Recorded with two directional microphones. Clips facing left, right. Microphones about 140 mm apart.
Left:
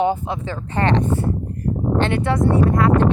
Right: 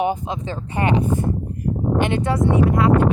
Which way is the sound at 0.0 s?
15° right (ahead or behind).